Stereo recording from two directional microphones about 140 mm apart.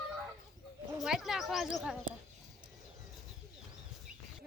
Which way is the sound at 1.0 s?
5° right (ahead or behind).